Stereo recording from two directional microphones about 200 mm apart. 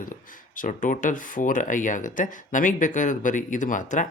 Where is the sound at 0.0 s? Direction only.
40° left (ahead or behind).